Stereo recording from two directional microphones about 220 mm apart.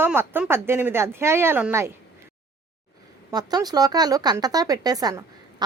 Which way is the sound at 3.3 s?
20° right (ahead or behind).